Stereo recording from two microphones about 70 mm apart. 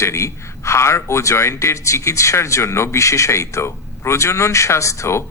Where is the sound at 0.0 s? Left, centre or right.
Left.